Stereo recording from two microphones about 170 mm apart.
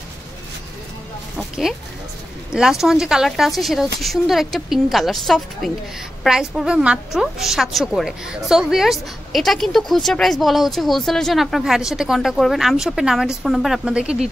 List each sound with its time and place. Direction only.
2.5 s a woman's voice: 5° right (ahead or behind)